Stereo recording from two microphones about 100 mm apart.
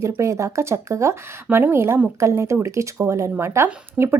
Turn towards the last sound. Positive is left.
turn(degrees=-25)  # may be behind; listen again after turning